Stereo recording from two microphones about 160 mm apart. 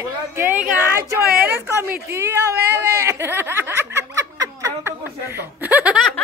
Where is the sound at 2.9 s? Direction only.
20° right (ahead or behind).